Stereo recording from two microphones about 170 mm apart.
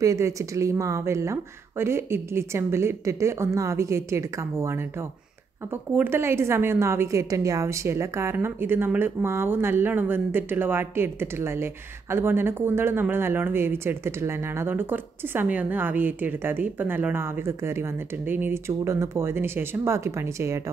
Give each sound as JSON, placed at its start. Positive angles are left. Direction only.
{"t": 0.0, "sound": "a woman's voice", "side_deg": -20}